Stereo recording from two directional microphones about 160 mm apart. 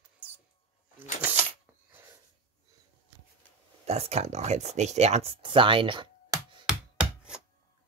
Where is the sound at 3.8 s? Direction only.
40° right (ahead or behind).